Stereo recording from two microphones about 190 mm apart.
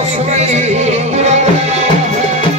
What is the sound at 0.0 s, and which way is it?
Music, 35° right (ahead or behind).